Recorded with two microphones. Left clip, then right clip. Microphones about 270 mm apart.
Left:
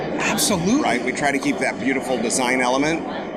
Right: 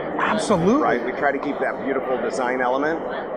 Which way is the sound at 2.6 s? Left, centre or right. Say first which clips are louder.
Left 1 dB; left.